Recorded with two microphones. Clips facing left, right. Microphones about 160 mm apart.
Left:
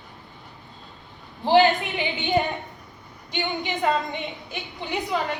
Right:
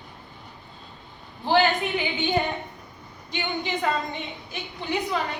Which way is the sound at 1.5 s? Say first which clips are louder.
Left 4 dB; 20° left (ahead or behind).